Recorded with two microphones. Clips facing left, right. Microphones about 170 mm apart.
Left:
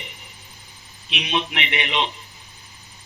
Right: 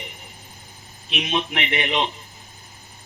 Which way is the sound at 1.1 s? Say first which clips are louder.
Right 1 dB; 45° right (ahead or behind).